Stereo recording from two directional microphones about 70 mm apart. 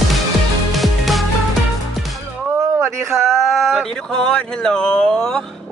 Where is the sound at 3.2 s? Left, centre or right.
Centre.